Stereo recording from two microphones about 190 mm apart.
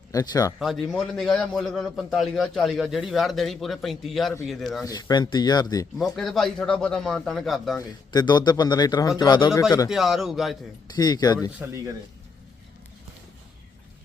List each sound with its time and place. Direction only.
0.1 s speech: 20° left (ahead or behind)
0.6 s a man's voice: centre (ahead or behind)
4.9 s speech: 20° left (ahead or behind)
6.1 s a man's voice: centre (ahead or behind)
7.8 s speech: 20° left (ahead or behind)
9.9 s a man's voice: centre (ahead or behind)
10.9 s speech: 20° left (ahead or behind)
11.6 s speech: 15° right (ahead or behind)